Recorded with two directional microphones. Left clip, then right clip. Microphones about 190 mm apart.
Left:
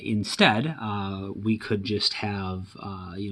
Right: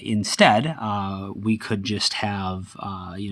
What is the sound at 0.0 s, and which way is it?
Speech, 30° right (ahead or behind).